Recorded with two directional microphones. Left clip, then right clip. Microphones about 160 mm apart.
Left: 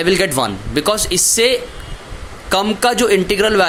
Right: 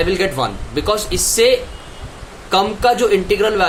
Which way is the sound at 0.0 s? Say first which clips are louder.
Left 2 dB; 45° left (ahead or behind).